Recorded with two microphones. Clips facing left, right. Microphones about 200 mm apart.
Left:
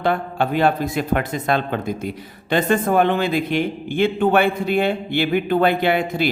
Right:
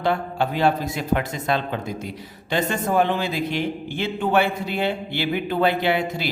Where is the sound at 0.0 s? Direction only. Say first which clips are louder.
Left 2 dB; 55° left (ahead or behind).